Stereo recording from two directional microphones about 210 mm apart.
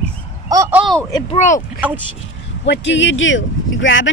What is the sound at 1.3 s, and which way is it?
Speech, 35° left (ahead or behind).